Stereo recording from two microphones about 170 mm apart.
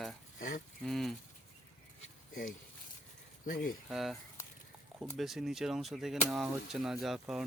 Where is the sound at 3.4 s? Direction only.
60° left (ahead or behind).